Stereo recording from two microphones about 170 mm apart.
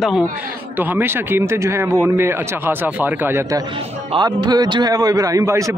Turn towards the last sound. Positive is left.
turn(degrees=-15)  # may be behind; listen again after turning